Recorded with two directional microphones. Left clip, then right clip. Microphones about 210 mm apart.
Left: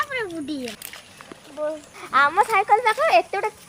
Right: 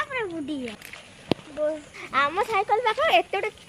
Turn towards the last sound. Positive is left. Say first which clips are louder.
# left 3 dB
turn(degrees=-5)  # may be behind; listen again after turning